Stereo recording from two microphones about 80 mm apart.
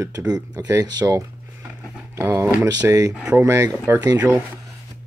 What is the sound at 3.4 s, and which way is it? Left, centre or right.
Speech, right.